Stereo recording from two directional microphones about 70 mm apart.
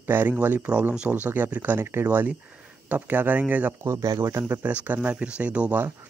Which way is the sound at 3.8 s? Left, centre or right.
Right.